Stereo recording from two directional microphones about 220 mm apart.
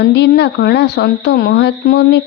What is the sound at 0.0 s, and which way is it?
A woman's voice, 50° left (ahead or behind).